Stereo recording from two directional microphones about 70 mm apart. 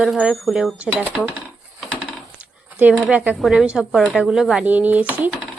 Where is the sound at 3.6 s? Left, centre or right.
Centre.